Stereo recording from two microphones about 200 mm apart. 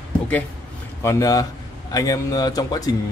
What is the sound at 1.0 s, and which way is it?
Speech, 15° left (ahead or behind).